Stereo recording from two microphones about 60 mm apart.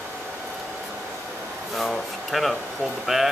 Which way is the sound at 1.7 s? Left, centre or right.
Centre.